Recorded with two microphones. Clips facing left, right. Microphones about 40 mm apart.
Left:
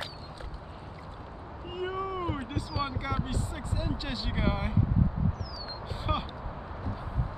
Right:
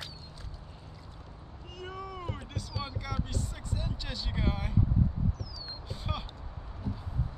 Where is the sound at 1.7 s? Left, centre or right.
Left.